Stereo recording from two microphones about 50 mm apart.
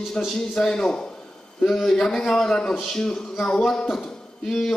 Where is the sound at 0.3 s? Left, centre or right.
Centre.